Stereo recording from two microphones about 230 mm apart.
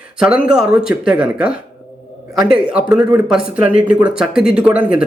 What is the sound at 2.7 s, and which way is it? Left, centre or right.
Speech, centre.